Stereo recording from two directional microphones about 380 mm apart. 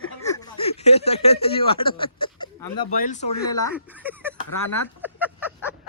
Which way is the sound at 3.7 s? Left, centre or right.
Centre.